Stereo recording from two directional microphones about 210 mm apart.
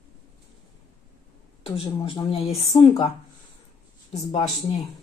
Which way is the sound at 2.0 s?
25° left (ahead or behind).